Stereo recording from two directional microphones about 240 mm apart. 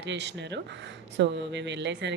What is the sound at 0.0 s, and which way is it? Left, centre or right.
A woman's voice, right.